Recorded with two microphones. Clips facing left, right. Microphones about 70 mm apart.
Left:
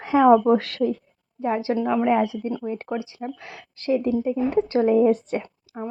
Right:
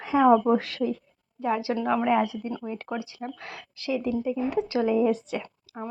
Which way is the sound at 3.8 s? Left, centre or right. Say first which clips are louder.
Left 5 dB; left.